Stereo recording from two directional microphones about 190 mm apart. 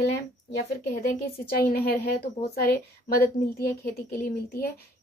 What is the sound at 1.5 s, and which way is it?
Speech, 55° left (ahead or behind).